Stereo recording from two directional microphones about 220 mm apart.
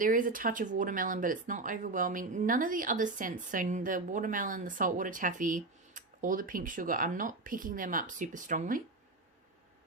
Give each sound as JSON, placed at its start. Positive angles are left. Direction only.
{"t": 0.0, "sound": "speech", "side_deg": -40}